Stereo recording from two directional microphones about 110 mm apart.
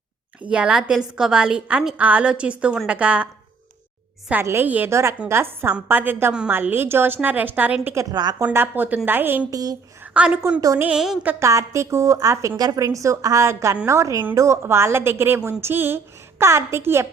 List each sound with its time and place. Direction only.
0.4 s a woman's voice: 10° right (ahead or behind)
4.3 s a woman's voice: 20° right (ahead or behind)
8.1 s a woman's voice: 40° right (ahead or behind)
8.4 s a woman's voice: 20° right (ahead or behind)
9.5 s a woman's voice: 35° right (ahead or behind)
10.0 s a woman's voice: 15° right (ahead or behind)
10.9 s a sound: 5° right (ahead or behind)
11.3 s a woman's voice: 25° right (ahead or behind)